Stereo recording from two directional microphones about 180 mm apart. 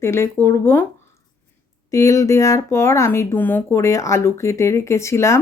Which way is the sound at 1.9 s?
15° left (ahead or behind).